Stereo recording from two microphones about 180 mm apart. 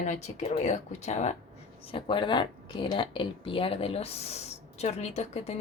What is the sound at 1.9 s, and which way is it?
Speech, 25° left (ahead or behind).